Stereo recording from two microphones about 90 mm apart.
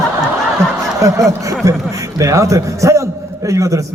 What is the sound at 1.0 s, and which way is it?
A man's voice, 35° right (ahead or behind).